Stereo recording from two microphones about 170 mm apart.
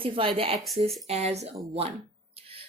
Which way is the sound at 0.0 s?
30° right (ahead or behind).